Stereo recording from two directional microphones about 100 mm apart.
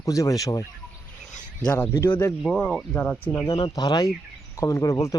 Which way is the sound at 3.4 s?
50° left (ahead or behind).